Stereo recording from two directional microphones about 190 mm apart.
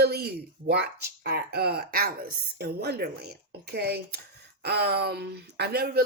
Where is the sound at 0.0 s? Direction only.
55° right (ahead or behind).